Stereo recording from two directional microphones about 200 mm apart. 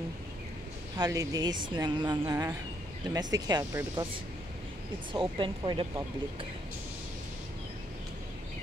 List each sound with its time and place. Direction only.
0.9 s speech: 20° right (ahead or behind)
5.1 s speech: 25° right (ahead or behind)